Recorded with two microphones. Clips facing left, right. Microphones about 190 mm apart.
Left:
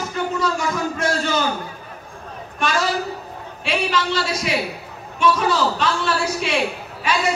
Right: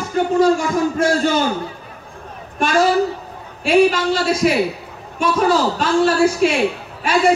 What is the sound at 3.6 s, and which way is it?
A man's voice, 50° right (ahead or behind).